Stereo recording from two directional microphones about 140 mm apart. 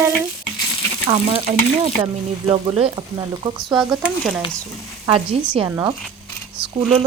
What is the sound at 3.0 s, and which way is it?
Speech, 30° right (ahead or behind).